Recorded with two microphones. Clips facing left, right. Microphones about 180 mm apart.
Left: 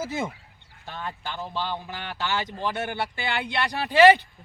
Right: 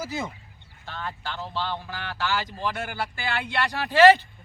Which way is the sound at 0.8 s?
15° left (ahead or behind).